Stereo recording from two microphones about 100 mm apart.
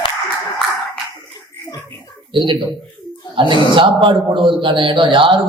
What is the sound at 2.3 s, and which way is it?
A man's voice, 55° right (ahead or behind).